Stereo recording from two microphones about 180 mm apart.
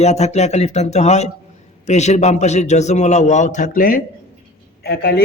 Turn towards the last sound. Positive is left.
turn(degrees=60)  # may be behind; listen again after turning